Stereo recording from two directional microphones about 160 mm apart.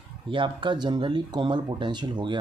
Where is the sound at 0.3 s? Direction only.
30° right (ahead or behind).